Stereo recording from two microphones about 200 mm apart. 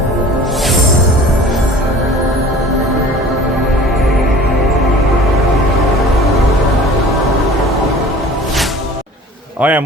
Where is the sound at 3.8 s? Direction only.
Centre (ahead or behind).